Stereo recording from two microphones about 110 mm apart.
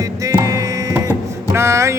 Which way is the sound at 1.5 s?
25° right (ahead or behind).